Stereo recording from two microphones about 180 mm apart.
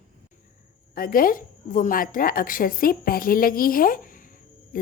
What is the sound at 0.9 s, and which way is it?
A woman's voice, 50° left (ahead or behind).